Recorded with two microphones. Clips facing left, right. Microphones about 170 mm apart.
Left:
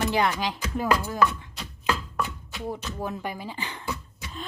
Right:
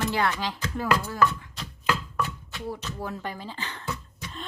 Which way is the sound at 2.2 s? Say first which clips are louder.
Even; 15° left (ahead or behind).